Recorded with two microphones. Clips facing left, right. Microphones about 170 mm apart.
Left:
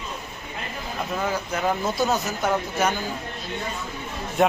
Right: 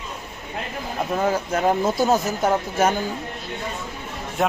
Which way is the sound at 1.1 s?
45° right (ahead or behind).